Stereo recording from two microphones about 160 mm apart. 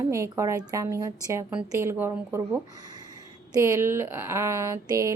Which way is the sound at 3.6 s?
15° right (ahead or behind).